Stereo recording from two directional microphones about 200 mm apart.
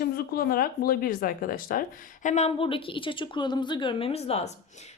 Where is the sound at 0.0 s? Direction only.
50° left (ahead or behind).